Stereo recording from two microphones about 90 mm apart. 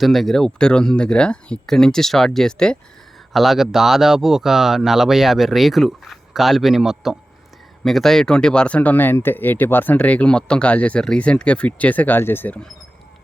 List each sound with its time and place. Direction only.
0.0 s speech: centre (ahead or behind); by 12.5 s 25° left (ahead or behind)